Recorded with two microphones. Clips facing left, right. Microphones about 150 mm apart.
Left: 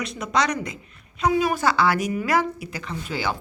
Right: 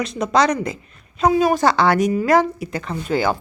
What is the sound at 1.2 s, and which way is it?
Speech, 35° right (ahead or behind).